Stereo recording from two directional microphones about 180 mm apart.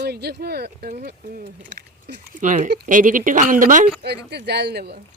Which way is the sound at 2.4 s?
45° right (ahead or behind).